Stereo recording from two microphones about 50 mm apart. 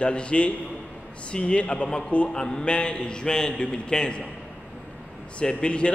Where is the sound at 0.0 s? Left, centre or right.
Left.